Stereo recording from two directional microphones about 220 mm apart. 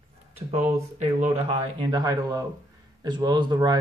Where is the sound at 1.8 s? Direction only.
20° right (ahead or behind).